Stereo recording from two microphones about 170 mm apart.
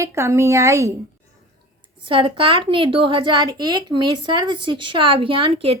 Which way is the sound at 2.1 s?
30° right (ahead or behind).